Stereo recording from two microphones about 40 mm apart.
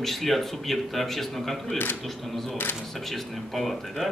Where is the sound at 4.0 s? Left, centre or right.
Centre.